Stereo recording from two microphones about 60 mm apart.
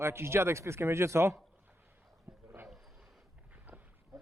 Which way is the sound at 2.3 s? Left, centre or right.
Right.